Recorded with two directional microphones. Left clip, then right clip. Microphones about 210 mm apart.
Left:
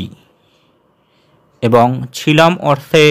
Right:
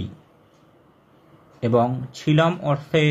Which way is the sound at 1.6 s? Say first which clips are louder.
Left 9 dB; 45° left (ahead or behind).